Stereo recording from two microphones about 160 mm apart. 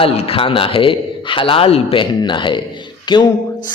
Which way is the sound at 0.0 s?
35° left (ahead or behind).